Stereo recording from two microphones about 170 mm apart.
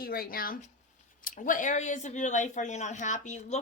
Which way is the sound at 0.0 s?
60° left (ahead or behind).